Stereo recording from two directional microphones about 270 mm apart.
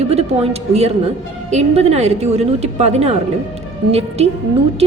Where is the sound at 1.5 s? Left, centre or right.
Right.